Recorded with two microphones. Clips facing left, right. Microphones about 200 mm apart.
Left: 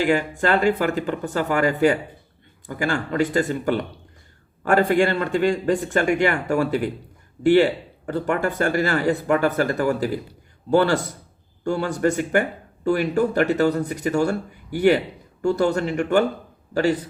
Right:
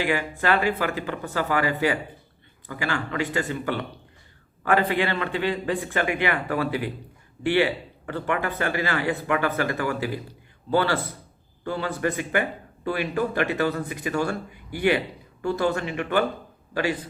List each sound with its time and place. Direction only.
0.0 s speech: 45° left (ahead or behind)